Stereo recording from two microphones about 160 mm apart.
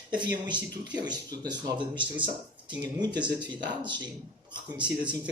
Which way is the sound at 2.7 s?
25° right (ahead or behind).